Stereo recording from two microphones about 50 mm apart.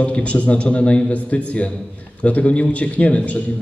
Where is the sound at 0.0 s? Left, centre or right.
Left.